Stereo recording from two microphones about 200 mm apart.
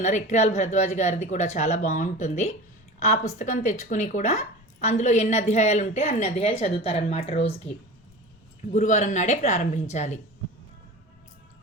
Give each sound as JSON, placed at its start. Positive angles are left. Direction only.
{"t": 0.0, "sound": "speech", "side_deg": 35}
{"t": 8.7, "sound": "speech", "side_deg": 35}